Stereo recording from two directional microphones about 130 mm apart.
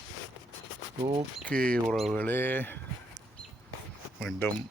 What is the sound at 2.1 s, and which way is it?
Speech, 15° left (ahead or behind).